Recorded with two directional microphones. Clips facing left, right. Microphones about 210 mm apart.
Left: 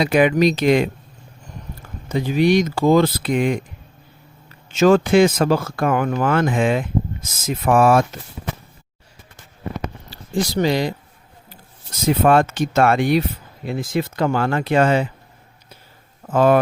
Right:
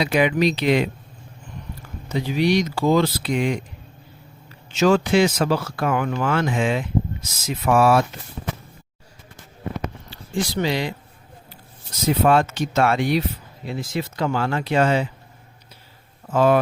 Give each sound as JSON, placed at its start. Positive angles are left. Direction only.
{"t": 0.0, "sound": "speech", "side_deg": 50}
{"t": 2.0, "sound": "speech", "side_deg": 50}
{"t": 4.7, "sound": "speech", "side_deg": 50}
{"t": 10.1, "sound": "speech", "side_deg": 40}
{"t": 12.2, "sound": "speech", "side_deg": 50}
{"t": 16.3, "sound": "speech", "side_deg": 55}